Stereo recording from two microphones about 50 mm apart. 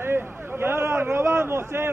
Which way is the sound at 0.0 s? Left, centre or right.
Right.